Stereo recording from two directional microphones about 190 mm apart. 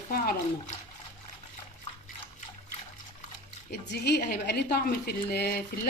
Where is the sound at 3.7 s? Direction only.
60° left (ahead or behind).